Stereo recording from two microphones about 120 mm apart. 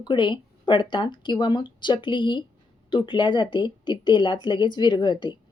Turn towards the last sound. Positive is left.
turn(degrees=40)  # may be behind; listen again after turning